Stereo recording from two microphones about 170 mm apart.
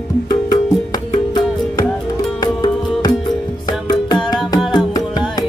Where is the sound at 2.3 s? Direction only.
25° left (ahead or behind).